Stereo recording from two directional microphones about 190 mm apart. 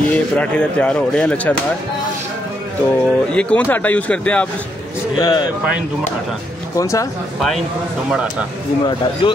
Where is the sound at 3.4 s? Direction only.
5° left (ahead or behind).